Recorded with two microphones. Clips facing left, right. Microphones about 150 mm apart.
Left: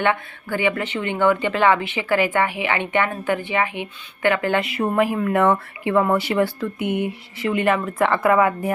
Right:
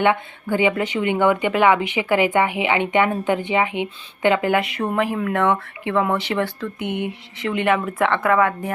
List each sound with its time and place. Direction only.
0.0 s a woman's voice: 15° right (ahead or behind)
4.5 s speech: centre (ahead or behind)